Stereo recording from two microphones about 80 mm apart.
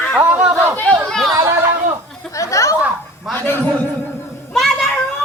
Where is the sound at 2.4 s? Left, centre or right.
Left.